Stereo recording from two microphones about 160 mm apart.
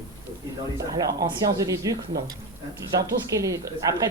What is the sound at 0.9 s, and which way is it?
A woman's voice, 20° right (ahead or behind).